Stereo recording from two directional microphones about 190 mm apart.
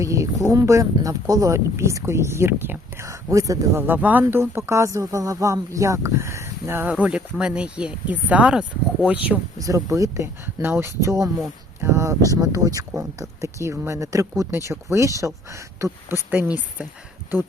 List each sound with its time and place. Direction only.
0.0 s speech: 15° right (ahead or behind)
9.6 s speech: 15° right (ahead or behind)